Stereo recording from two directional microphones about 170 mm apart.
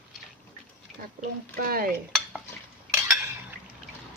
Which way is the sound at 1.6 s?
60° right (ahead or behind).